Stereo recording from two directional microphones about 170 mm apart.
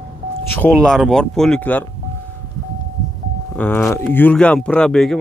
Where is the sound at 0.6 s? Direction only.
5° left (ahead or behind).